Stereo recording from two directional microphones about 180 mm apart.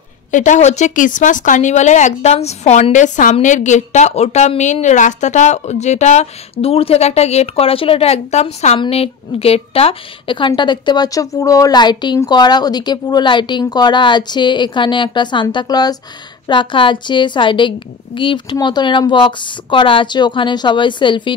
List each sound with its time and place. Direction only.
0.3 s a woman's voice: 45° left (ahead or behind); by 21.4 s 25° left (ahead or behind)